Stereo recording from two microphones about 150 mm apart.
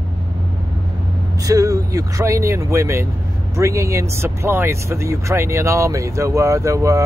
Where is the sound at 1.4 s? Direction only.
20° right (ahead or behind).